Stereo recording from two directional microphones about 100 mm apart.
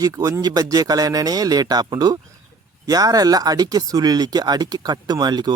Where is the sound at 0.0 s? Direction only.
35° right (ahead or behind).